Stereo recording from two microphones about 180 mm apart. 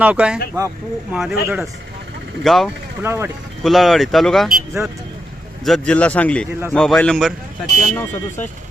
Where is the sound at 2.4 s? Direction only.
Centre (ahead or behind).